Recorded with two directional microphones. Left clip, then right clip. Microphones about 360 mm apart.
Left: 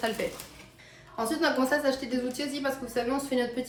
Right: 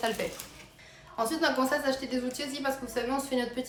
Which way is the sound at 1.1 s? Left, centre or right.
Centre.